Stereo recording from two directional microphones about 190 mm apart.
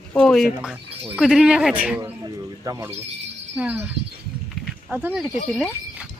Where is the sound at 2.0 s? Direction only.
15° right (ahead or behind).